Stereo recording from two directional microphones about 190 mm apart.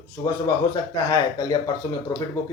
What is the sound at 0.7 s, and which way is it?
A man's voice, 20° left (ahead or behind).